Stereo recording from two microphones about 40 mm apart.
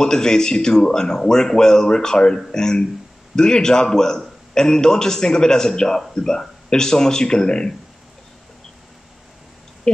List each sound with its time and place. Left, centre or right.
0.0 s a man's voice: centre